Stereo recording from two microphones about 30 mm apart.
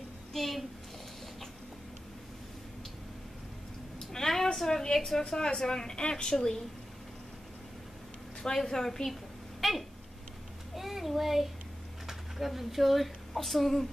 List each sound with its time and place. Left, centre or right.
0.3 s a child's voice: centre
4.0 s a sound: centre
4.6 s a woman's voice: centre
8.5 s a woman's voice: centre
9.6 s a sound: centre
12.1 s speech: centre